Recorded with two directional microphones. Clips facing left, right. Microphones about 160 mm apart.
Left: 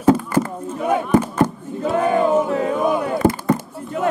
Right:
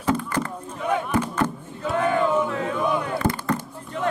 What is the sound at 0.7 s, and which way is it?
Speech, 40° left (ahead or behind).